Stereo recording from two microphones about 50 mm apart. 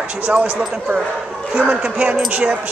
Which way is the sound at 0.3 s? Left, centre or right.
Right.